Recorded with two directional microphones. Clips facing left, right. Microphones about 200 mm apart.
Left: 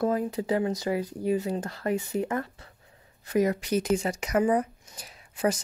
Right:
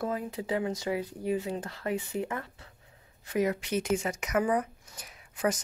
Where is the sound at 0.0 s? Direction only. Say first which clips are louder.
Left 6 dB; 40° left (ahead or behind).